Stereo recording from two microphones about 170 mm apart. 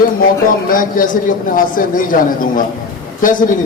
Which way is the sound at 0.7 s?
55° left (ahead or behind).